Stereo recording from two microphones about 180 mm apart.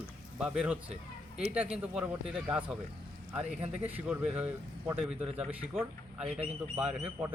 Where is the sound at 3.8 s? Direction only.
5° right (ahead or behind).